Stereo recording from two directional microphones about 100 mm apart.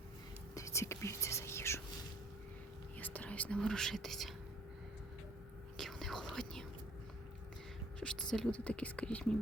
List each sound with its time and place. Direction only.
0.5 s whispering: 30° left (ahead or behind)
3.0 s whispering: 15° left (ahead or behind)
5.7 s whispering: 5° left (ahead or behind)
7.9 s speech: 5° left (ahead or behind)